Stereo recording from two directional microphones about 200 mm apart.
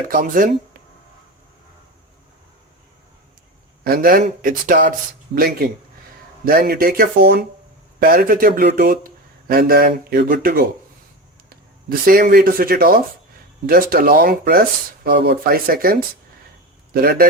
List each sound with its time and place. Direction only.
0.1 s speech: 45° right (ahead or behind)
3.8 s speech: 45° right (ahead or behind)